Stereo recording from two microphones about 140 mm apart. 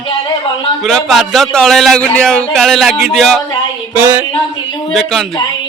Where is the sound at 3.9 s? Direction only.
20° right (ahead or behind).